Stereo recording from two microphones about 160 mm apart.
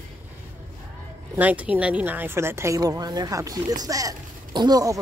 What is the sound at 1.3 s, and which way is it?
A woman's voice, 10° right (ahead or behind).